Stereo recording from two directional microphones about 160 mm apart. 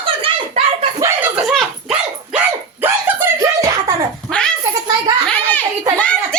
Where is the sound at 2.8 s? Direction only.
15° right (ahead or behind).